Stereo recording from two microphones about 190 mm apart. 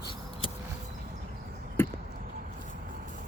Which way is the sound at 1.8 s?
15° left (ahead or behind).